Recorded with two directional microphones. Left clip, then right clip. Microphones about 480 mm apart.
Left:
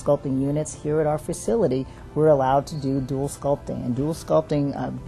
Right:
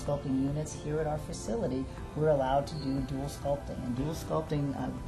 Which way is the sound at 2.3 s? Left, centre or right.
Left.